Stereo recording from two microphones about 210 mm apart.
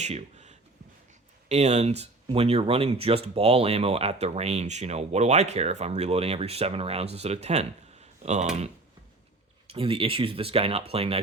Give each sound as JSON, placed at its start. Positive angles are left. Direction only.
{"t": 0.0, "sound": "a sound", "side_deg": -30}
{"t": 1.5, "sound": "speech", "side_deg": -30}
{"t": 9.6, "sound": "speech", "side_deg": -25}